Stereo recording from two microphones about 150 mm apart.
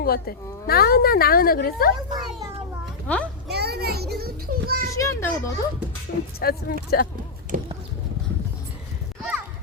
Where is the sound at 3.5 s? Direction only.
90° right.